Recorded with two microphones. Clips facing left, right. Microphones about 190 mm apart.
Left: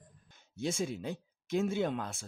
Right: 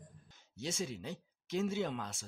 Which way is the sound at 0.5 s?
55° left (ahead or behind).